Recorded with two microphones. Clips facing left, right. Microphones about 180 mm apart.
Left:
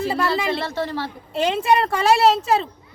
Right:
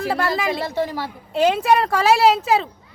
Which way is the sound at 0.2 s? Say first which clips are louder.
Even; 5° right (ahead or behind).